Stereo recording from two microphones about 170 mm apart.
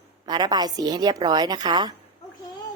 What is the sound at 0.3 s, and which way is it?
A woman's voice, 25° right (ahead or behind).